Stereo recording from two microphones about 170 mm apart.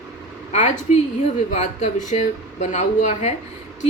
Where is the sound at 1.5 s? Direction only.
40° left (ahead or behind).